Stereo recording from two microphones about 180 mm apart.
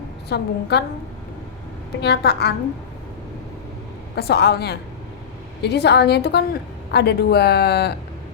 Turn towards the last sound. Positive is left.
turn(degrees=65)  # may be behind; listen again after turning